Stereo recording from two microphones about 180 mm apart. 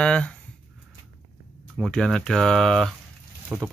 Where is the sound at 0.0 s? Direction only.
5° left (ahead or behind).